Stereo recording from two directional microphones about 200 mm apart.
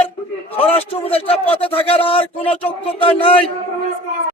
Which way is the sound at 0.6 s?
30° left (ahead or behind).